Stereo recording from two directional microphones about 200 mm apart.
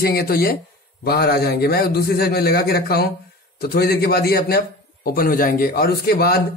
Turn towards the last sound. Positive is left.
turn(degrees=50)  # may be behind; listen again after turning